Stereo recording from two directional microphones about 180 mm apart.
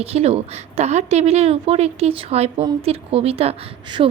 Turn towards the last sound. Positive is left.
turn(degrees=-30)  # may be behind; listen again after turning